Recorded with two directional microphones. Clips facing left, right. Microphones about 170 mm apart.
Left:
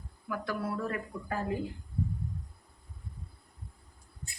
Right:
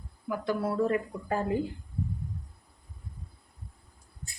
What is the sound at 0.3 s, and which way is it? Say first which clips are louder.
Speech: right 5 dB; 25° right (ahead or behind).